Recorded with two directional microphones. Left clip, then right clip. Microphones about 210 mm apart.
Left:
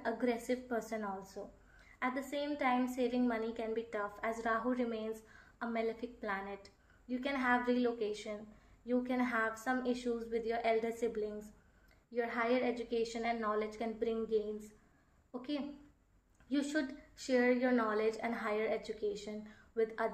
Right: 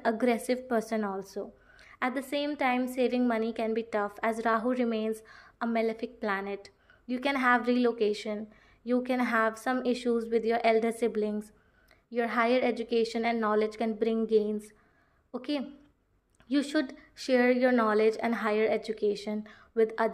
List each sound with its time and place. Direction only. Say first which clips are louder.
0.0 s a woman's voice: right 8 dB; 45° right (ahead or behind)